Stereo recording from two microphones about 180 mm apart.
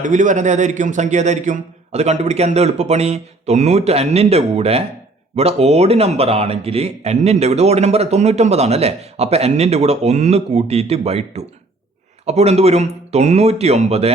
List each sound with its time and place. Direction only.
0.0 s speech: 45° right (ahead or behind)